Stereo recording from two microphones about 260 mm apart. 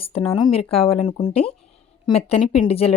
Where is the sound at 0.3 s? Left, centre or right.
Centre.